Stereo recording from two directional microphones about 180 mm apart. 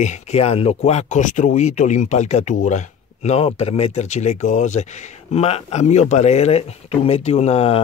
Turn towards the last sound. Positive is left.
turn(degrees=35)  # may be behind; listen again after turning